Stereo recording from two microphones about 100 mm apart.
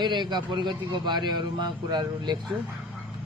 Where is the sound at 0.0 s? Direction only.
50° right (ahead or behind).